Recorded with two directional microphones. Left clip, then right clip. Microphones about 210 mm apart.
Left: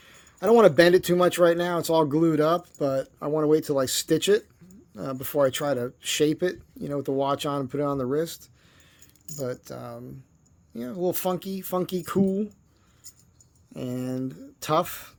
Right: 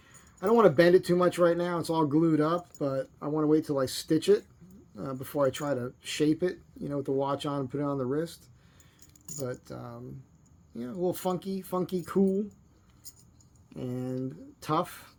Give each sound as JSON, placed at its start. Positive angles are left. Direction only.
{"t": 0.0, "sound": "speech", "side_deg": 50}
{"t": 13.7, "sound": "speech", "side_deg": 45}